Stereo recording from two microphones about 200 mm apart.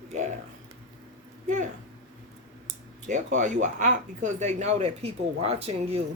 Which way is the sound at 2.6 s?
35° right (ahead or behind).